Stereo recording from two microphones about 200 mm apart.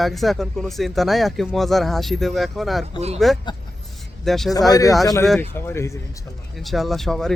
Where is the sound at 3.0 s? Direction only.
30° right (ahead or behind).